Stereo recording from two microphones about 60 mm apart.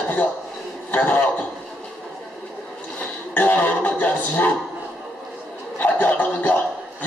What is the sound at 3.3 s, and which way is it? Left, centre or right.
A man's voice, left.